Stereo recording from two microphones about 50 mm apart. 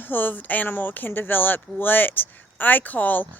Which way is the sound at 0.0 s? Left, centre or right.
Left.